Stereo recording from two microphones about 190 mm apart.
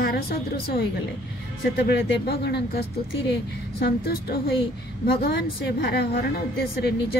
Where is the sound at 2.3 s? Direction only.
60° left (ahead or behind).